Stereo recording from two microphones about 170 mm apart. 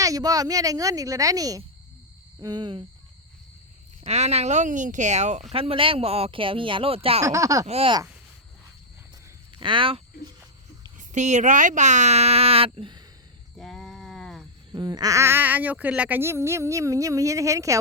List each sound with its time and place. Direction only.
0.0 s speech: 20° right (ahead or behind)
4.0 s speech: 40° right (ahead or behind)
7.3 s speech: 20° right (ahead or behind)
7.7 s speech: 35° right (ahead or behind)
9.6 s speech: 30° right (ahead or behind)
10.9 s speech: 45° right (ahead or behind)
13.6 s a sound: centre (ahead or behind)
14.7 s speech: 25° right (ahead or behind)